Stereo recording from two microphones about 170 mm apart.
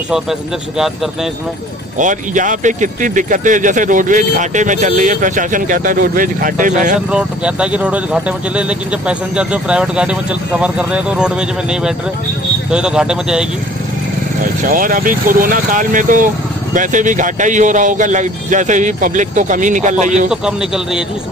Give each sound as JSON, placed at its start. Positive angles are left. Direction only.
{"t": 0.1, "sound": "speech", "side_deg": 0}
{"t": 2.0, "sound": "speech", "side_deg": -50}
{"t": 7.1, "sound": "speech", "side_deg": -5}
{"t": 14.6, "sound": "speech", "side_deg": -55}
{"t": 20.2, "sound": "speech", "side_deg": -5}